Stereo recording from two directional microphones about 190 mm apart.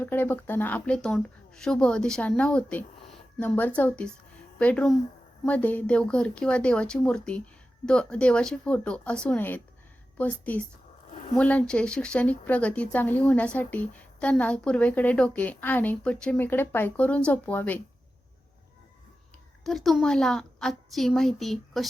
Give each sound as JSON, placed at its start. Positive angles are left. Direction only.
{"t": 0.0, "sound": "a woman's voice", "side_deg": 10}
{"t": 11.1, "sound": "a sound", "side_deg": 40}
{"t": 11.3, "sound": "speech", "side_deg": 5}
{"t": 19.6, "sound": "a woman's voice", "side_deg": 0}